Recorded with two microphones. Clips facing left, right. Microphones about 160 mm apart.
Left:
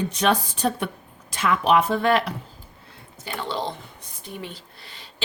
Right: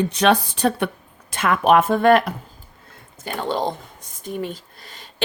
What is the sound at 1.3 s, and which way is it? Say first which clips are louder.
A woman's voice: right 3 dB; 55° right (ahead or behind).